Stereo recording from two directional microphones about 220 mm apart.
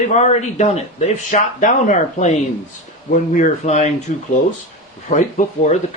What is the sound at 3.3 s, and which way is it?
Speech, 35° left (ahead or behind).